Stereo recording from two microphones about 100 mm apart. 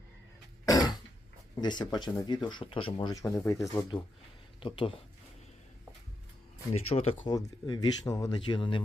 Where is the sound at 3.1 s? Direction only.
30° left (ahead or behind).